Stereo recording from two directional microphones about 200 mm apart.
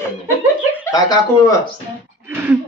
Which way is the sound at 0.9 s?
20° left (ahead or behind).